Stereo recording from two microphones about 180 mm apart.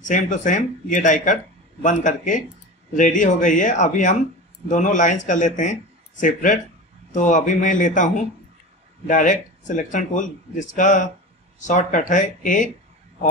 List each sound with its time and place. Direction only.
0.0 s a man's voice: 45° left (ahead or behind)